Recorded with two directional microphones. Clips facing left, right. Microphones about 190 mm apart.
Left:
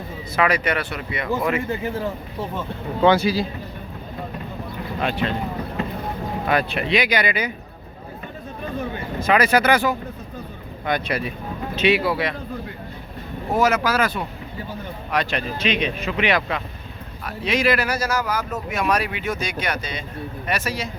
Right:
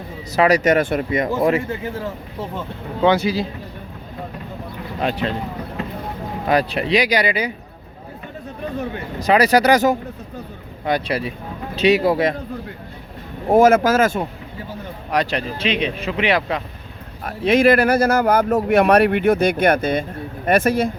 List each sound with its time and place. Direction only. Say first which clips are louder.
0.3 s speech: right 6 dB; 40° right (ahead or behind)
3.0 s speech: even; 15° right (ahead or behind)
4.9 s speech: right 2 dB; 35° right (ahead or behind)
6.5 s speech: right 4 dB; 35° right (ahead or behind)
9.2 s speech: right 3 dB; 35° right (ahead or behind)
13.5 s speech: right 7 dB; 50° right (ahead or behind); by 16.6 s 30° right (ahead or behind)
17.2 s speech: right 7 dB; 50° right (ahead or behind)